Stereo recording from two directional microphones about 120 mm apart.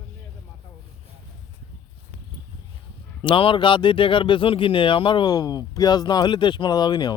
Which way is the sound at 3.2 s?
45° left (ahead or behind).